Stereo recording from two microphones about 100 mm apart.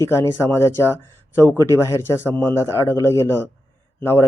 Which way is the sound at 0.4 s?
25° left (ahead or behind).